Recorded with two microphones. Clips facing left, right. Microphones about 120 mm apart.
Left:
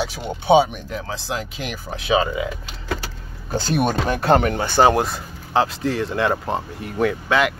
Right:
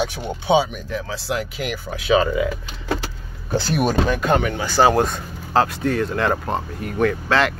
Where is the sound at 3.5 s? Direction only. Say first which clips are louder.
Even; 35° left (ahead or behind).